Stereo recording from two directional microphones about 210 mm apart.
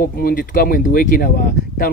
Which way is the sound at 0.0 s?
45° left (ahead or behind).